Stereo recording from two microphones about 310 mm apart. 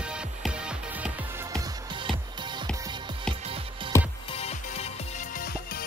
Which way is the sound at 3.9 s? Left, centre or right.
Centre.